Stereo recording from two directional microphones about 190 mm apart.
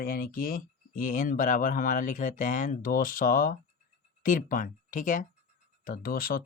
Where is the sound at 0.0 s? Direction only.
50° left (ahead or behind).